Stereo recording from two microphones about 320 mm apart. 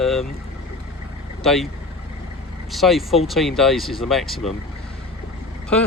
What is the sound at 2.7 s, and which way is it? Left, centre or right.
Speech, centre.